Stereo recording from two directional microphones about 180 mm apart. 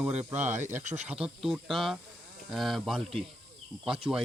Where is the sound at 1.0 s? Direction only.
5° right (ahead or behind).